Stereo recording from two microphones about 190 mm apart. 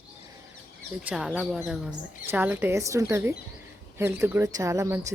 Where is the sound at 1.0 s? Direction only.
5° right (ahead or behind).